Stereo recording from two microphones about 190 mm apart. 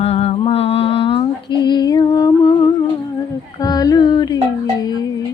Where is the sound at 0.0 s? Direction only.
30° left (ahead or behind).